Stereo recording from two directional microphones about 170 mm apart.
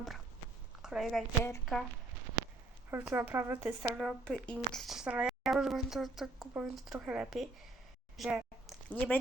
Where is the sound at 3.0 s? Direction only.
10° right (ahead or behind).